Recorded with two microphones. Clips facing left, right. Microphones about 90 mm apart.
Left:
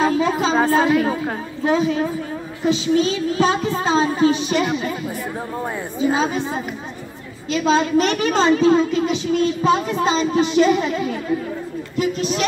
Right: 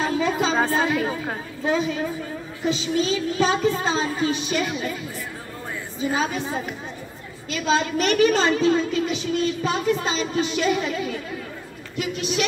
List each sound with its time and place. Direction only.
0.0 s child singing: 40° left (ahead or behind)
0.7 s a woman's voice: 35° left (ahead or behind)
7.7 s a woman's voice: 35° left (ahead or behind)